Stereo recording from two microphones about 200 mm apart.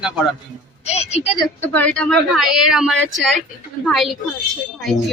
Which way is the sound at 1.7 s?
5° left (ahead or behind).